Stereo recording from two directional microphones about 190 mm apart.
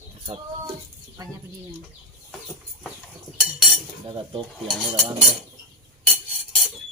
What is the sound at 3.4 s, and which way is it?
Cutlery, centre (ahead or behind).